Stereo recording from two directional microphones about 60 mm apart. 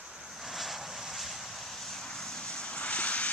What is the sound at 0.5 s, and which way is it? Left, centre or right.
Vehicle, centre.